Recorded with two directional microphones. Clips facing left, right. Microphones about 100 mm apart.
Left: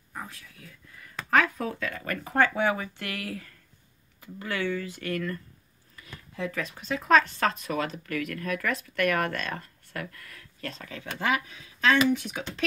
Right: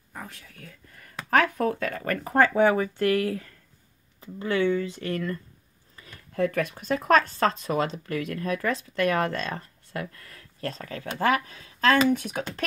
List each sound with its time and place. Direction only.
0.1 s speech: 50° right (ahead or behind); by 5.4 s 25° right (ahead or behind)
6.3 s speech: 55° right (ahead or behind)